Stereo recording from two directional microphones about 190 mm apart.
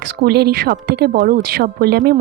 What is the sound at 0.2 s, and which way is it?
Speech, 60° right (ahead or behind).